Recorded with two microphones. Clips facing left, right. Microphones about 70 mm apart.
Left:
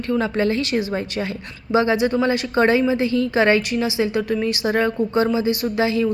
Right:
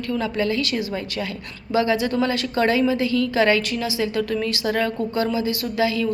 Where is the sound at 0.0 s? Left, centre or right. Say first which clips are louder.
Left 3 dB; left.